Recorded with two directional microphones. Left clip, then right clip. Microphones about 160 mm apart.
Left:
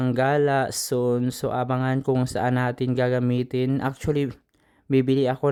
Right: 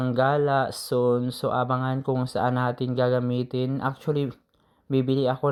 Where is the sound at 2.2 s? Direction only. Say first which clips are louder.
Even; 25° left (ahead or behind).